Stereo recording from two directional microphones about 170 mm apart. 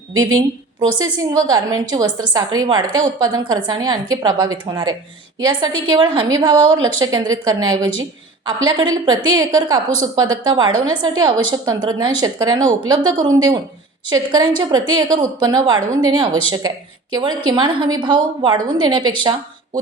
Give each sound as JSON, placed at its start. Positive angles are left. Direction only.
{"t": 0.3, "sound": "a woman's voice", "side_deg": -25}